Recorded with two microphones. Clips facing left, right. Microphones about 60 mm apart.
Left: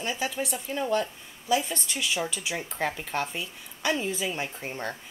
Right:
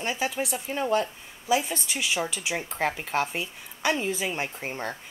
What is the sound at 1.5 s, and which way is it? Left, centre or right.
Speech, centre.